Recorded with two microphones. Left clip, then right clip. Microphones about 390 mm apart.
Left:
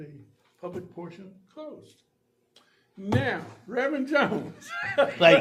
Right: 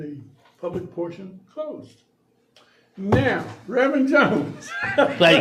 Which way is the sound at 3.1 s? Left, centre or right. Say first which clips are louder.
Right 7 dB; left.